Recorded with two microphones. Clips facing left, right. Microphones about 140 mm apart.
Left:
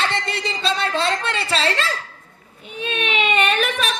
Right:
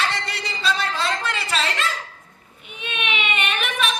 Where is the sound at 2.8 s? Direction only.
35° left (ahead or behind).